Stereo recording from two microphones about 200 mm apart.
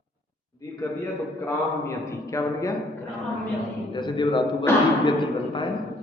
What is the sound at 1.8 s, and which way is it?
Speech, 15° left (ahead or behind).